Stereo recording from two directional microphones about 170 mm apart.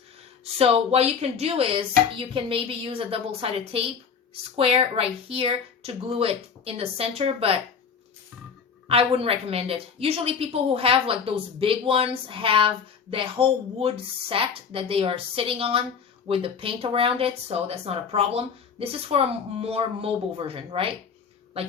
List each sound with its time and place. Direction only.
0.6 s a woman's voice: 35° right (ahead or behind)
8.9 s a woman's voice: 35° right (ahead or behind)